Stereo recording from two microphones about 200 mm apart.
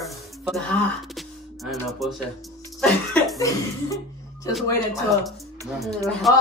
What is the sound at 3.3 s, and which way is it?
Cough, 15° left (ahead or behind).